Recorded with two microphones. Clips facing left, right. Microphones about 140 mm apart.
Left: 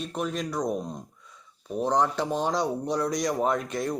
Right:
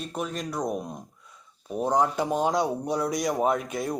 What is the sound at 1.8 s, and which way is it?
Speech, 5° right (ahead or behind).